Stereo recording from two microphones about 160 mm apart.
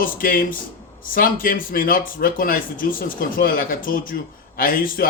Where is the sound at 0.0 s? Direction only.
60° left (ahead or behind).